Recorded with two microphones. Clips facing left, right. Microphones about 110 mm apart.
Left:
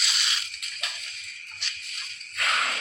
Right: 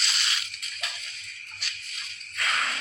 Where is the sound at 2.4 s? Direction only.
55° left (ahead or behind).